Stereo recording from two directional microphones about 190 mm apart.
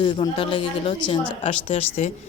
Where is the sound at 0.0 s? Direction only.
25° left (ahead or behind).